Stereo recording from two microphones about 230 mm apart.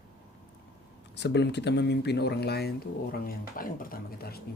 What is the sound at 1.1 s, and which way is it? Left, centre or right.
Speech, left.